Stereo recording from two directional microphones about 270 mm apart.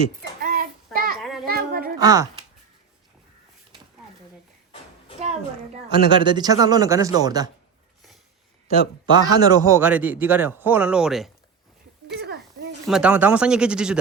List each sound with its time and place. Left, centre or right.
0.2 s child singing: right
1.2 s children playing: centre
1.5 s a sound: right
5.9 s a man's voice: centre
8.6 s a man's voice: centre
12.0 s a sound: right
12.9 s speech: centre